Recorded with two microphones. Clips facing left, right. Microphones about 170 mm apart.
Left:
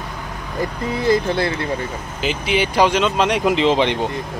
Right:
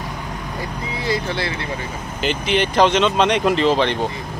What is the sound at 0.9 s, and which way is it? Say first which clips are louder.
Speech: left 6 dB; 50° left (ahead or behind).